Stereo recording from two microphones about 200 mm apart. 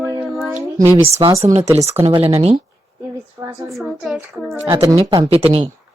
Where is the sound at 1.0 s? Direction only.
30° right (ahead or behind).